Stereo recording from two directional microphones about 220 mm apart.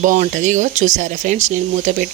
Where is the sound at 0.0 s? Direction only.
35° right (ahead or behind).